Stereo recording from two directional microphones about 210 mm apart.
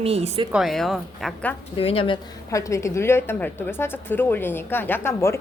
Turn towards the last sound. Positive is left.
turn(degrees=10)  # may be behind; listen again after turning